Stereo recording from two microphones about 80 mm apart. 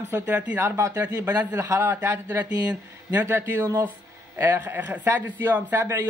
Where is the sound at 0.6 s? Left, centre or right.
Right.